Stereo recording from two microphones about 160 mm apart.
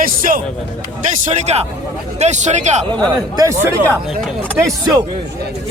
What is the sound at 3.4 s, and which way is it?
Speech, 20° right (ahead or behind).